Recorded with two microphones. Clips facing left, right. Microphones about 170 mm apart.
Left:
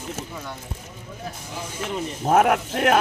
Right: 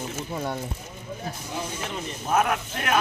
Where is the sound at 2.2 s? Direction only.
65° left (ahead or behind).